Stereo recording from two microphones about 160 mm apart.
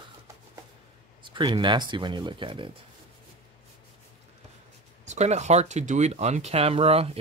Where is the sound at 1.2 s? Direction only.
30° right (ahead or behind).